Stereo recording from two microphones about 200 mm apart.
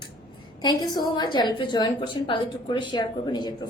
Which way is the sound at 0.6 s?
20° left (ahead or behind).